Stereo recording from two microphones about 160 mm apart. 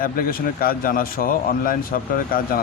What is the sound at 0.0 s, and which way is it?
Speech, 65° left (ahead or behind).